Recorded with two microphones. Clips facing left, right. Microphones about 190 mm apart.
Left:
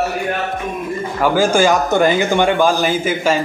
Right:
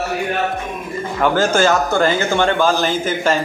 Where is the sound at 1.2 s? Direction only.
10° left (ahead or behind).